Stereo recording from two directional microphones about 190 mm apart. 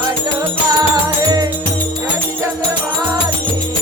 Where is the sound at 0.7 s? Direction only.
20° right (ahead or behind).